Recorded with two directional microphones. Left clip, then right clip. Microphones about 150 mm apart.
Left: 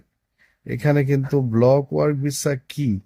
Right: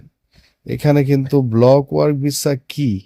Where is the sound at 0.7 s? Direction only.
25° right (ahead or behind).